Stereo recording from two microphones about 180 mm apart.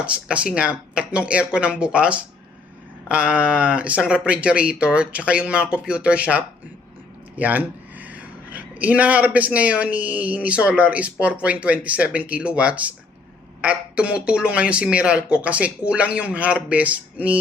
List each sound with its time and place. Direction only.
0.0 s speech: 5° right (ahead or behind)